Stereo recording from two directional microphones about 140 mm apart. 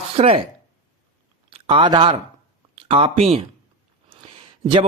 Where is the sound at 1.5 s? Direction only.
40° right (ahead or behind).